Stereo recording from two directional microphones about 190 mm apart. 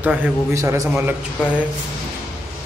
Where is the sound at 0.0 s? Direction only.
10° right (ahead or behind).